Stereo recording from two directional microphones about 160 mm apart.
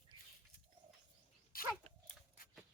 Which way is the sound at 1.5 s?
65° left (ahead or behind).